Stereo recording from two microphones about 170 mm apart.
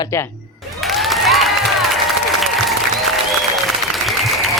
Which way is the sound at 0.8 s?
Centre (ahead or behind).